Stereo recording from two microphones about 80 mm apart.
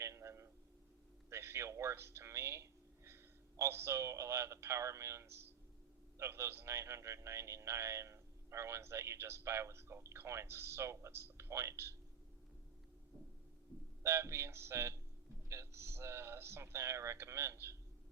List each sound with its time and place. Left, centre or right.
0.0 s a sound: right
3.6 s a man's voice: right
14.0 s a man's voice: right